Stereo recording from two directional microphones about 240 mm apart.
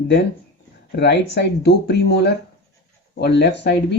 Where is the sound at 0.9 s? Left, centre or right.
Left.